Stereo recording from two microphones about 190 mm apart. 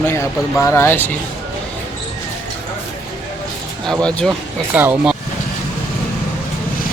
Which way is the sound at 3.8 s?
5° left (ahead or behind).